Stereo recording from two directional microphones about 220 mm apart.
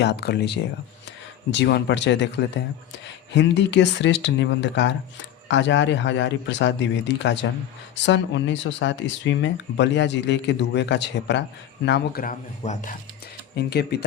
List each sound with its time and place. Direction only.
0.0 s speech: 50° left (ahead or behind)
3.3 s speech: 55° left (ahead or behind)
11.9 s speech: 40° left (ahead or behind)
13.6 s speech: 45° left (ahead or behind)